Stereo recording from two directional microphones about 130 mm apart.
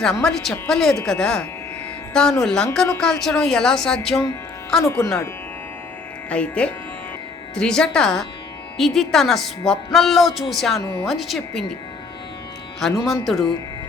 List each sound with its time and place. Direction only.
0.0 s a woman's voice: 5° left (ahead or behind)
4.8 s speech: 20° left (ahead or behind)
6.3 s a woman's voice: 10° left (ahead or behind)
12.8 s a woman's voice: centre (ahead or behind)